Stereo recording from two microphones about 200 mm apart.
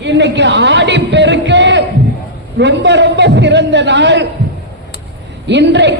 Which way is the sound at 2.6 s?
60° right (ahead or behind).